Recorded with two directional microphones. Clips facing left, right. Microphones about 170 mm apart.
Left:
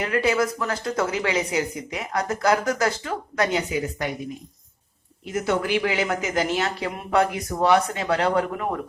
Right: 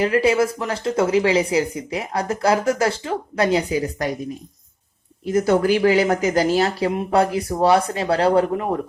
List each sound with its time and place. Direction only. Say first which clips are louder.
0.0 s a woman's voice: right 5 dB; 30° right (ahead or behind)
5.2 s speech: right 7 dB; 35° right (ahead or behind)